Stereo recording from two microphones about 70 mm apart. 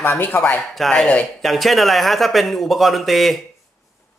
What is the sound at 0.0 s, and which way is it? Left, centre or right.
Speech, left.